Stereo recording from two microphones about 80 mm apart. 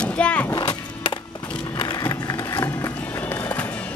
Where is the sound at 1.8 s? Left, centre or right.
Left.